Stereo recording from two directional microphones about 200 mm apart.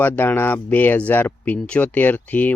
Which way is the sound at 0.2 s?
10° left (ahead or behind).